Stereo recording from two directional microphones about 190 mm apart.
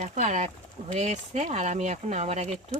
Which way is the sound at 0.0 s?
40° right (ahead or behind).